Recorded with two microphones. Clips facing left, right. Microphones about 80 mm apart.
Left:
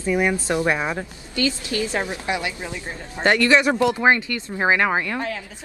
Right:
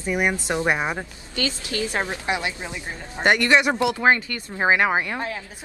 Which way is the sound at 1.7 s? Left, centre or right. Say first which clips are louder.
Even; right.